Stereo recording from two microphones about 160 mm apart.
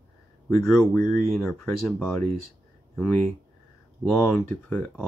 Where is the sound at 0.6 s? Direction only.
5° left (ahead or behind).